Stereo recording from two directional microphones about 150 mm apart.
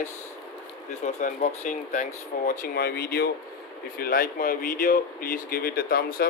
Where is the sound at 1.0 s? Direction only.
50° left (ahead or behind); by 3.3 s 90° left.